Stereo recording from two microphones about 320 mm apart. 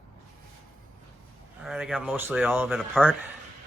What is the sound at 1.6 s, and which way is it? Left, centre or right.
Speech, centre.